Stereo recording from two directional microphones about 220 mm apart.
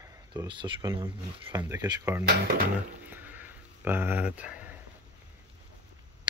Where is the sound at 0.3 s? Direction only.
20° right (ahead or behind).